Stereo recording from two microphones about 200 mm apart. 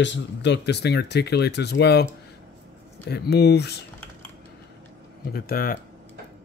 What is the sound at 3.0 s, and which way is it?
Speech, 55° left (ahead or behind).